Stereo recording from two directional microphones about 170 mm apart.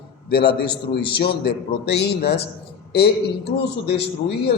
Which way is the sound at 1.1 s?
75° left (ahead or behind).